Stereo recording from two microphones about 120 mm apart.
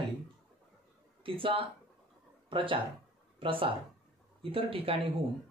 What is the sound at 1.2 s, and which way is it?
Speech, 45° right (ahead or behind).